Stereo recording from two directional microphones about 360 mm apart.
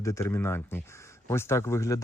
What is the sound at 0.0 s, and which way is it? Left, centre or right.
Speech, centre.